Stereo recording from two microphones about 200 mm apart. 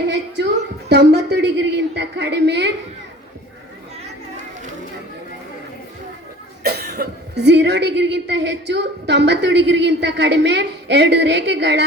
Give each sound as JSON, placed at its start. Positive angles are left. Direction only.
{"t": 0.9, "sound": "speech", "side_deg": -55}
{"t": 6.6, "sound": "speech", "side_deg": -55}